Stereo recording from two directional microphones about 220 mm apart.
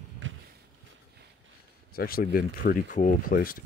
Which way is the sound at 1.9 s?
40° left (ahead or behind).